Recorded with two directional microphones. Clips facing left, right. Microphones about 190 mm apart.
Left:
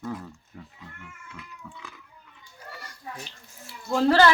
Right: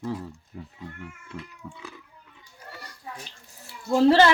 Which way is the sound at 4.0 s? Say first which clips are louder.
Right 2 dB; 25° right (ahead or behind).